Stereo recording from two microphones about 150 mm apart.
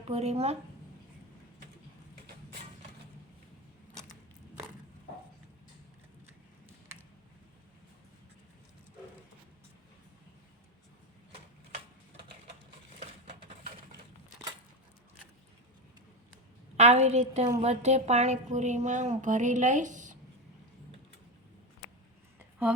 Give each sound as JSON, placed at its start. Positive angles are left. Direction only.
{"t": 0.1, "sound": "speech", "side_deg": -45}
{"t": 16.7, "sound": "a woman's voice", "side_deg": -45}
{"t": 22.4, "sound": "a sound", "side_deg": -10}